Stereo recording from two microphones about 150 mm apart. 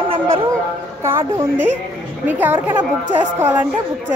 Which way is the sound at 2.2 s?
10° right (ahead or behind).